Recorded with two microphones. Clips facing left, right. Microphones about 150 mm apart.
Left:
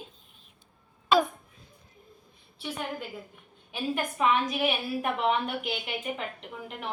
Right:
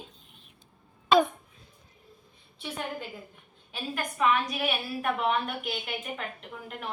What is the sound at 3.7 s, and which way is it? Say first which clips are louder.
A woman's voice: left 4 dB; 20° left (ahead or behind).